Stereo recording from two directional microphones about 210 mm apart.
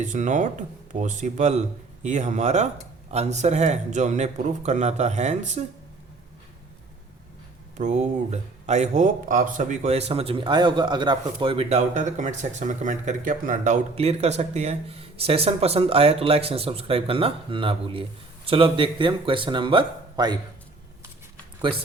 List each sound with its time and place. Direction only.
0.0 s speech: 35° right (ahead or behind)
7.8 s speech: 35° right (ahead or behind)